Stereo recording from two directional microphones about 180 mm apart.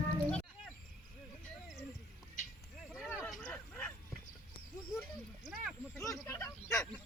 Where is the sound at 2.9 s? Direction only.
Centre (ahead or behind).